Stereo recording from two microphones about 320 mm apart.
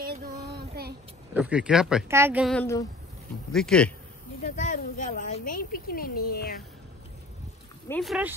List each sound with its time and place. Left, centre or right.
0.0 s child singing: right
1.3 s speech: centre
4.4 s speech: left
7.9 s speech: centre